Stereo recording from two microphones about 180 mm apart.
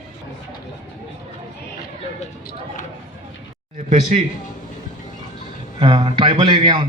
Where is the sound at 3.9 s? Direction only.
40° right (ahead or behind).